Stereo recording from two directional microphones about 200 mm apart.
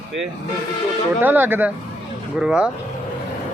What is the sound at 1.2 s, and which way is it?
Speech, 10° right (ahead or behind).